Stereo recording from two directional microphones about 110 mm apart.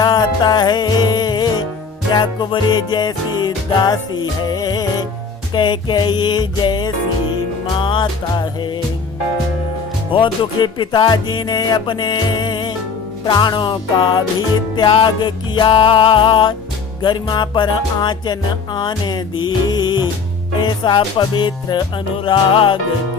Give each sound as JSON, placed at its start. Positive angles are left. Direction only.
{"t": 0.0, "sound": "music", "side_deg": 40}
{"t": 10.1, "sound": "music", "side_deg": 50}